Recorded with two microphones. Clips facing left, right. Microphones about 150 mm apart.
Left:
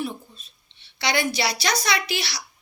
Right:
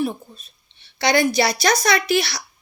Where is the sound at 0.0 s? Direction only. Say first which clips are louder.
Right 6 dB; 45° right (ahead or behind).